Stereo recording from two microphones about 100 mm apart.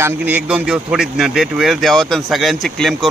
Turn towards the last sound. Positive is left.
turn(degrees=0)  # may be behind; listen again after turning